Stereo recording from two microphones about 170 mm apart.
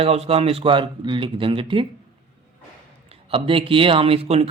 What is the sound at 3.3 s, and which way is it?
Speech, 30° right (ahead or behind).